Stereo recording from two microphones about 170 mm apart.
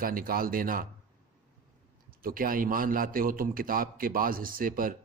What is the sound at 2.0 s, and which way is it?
Speech, 55° right (ahead or behind).